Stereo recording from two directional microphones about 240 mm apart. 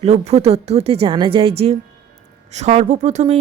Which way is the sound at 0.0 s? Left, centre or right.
Right.